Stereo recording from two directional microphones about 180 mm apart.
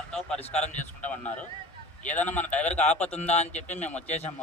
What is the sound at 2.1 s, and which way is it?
Speech, 10° left (ahead or behind).